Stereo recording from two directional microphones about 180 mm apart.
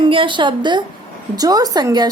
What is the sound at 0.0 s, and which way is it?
A woman's voice, 30° right (ahead or behind).